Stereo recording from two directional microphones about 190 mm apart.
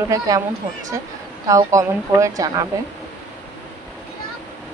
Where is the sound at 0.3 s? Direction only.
20° right (ahead or behind).